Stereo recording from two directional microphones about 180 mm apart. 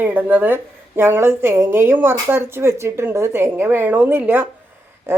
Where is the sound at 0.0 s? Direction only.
10° right (ahead or behind).